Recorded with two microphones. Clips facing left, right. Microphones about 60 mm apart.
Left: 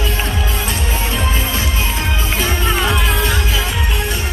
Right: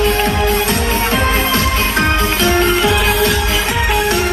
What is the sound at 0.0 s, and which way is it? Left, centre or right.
Music, right.